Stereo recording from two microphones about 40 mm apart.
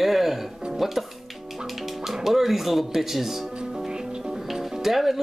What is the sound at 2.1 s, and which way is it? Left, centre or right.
Speech, centre.